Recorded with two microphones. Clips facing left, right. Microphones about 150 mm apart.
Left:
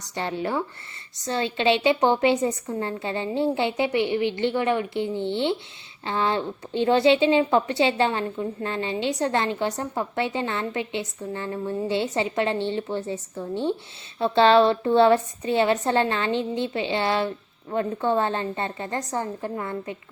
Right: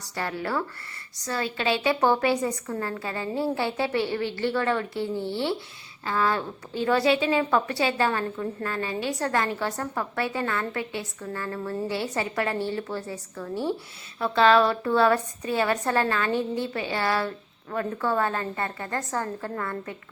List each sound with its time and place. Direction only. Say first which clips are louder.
0.0 s a woman's voice: left 3 dB; 20° left (ahead or behind)